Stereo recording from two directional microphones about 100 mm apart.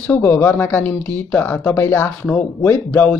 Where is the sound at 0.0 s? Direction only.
15° left (ahead or behind).